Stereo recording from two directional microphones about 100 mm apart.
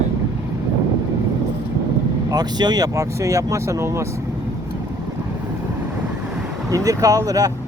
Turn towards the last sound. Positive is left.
turn(degrees=-35)  # may be behind; listen again after turning